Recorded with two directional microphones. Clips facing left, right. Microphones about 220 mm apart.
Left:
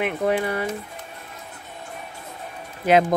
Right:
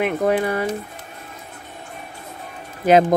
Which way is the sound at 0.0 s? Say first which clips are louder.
Right 3 dB; 45° right (ahead or behind).